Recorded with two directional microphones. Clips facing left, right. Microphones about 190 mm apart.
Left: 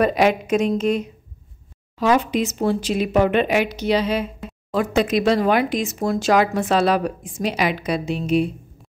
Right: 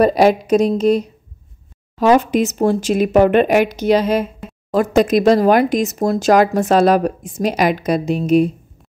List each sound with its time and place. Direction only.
0.0 s a woman's voice: 35° right (ahead or behind)